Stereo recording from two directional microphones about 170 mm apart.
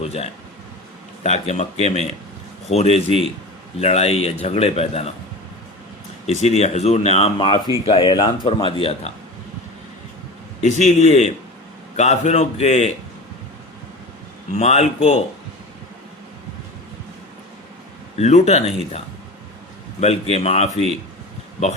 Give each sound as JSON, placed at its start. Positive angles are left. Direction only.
{"t": 0.0, "sound": "speech", "side_deg": 35}
{"t": 6.4, "sound": "speech", "side_deg": 40}
{"t": 10.6, "sound": "a man's voice", "side_deg": 45}
{"t": 14.5, "sound": "speech", "side_deg": 40}
{"t": 18.2, "sound": "speech", "side_deg": 40}